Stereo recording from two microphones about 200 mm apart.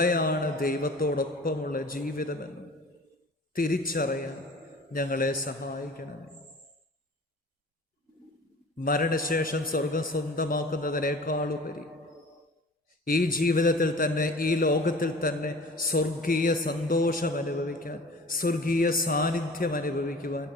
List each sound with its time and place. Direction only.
0.0 s a man's voice: 45° left (ahead or behind)
3.5 s a man's voice: 45° left (ahead or behind)
8.8 s a man's voice: 45° left (ahead or behind)
13.1 s a man's voice: 45° left (ahead or behind)